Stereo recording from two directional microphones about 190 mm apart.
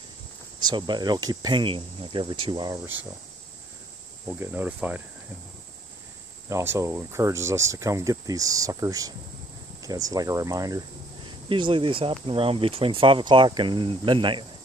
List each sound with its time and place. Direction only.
0.6 s speech: 25° right (ahead or behind)
4.4 s speech: 10° right (ahead or behind)
6.5 s speech: 15° right (ahead or behind)